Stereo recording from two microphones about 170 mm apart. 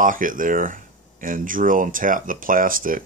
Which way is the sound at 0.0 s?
50° right (ahead or behind).